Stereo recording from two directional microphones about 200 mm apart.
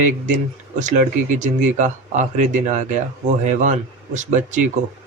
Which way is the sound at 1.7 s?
40° right (ahead or behind).